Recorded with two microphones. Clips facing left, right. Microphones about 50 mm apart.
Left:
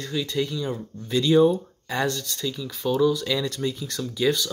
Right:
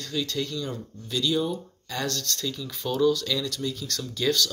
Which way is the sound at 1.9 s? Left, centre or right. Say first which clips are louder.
Left 4 dB; centre.